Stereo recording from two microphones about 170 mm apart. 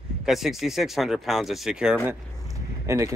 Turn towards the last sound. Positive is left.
turn(degrees=-20)  # may be behind; listen again after turning